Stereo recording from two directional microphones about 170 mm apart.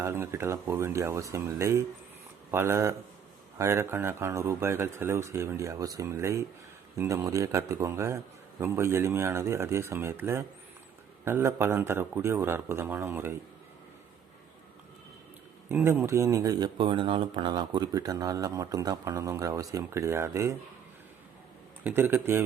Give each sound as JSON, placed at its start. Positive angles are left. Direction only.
{"t": 0.0, "sound": "a man's voice", "side_deg": -15}
{"t": 15.7, "sound": "speech", "side_deg": -15}
{"t": 21.8, "sound": "a man's voice", "side_deg": -10}